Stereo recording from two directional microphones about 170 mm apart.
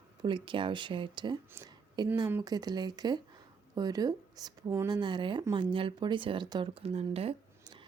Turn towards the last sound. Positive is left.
turn(degrees=-35)  # may be behind; listen again after turning